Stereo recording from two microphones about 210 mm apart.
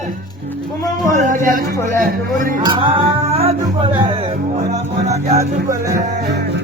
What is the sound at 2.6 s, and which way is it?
Music, 25° right (ahead or behind).